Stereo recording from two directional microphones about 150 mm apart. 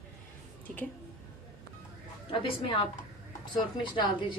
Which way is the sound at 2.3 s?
35° left (ahead or behind).